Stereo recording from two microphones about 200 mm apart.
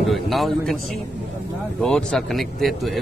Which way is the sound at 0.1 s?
Centre (ahead or behind).